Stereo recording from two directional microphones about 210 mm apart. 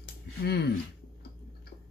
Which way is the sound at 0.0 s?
50° left (ahead or behind).